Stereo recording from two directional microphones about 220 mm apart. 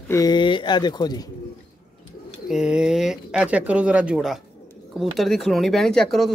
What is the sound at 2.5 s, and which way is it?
Speech, 5° right (ahead or behind).